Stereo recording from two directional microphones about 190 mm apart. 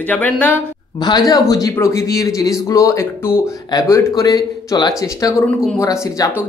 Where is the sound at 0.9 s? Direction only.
20° left (ahead or behind).